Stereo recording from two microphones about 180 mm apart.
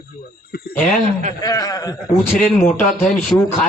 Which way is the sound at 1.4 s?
20° left (ahead or behind).